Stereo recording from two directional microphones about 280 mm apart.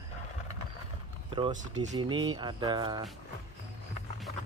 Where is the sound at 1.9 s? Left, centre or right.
Centre.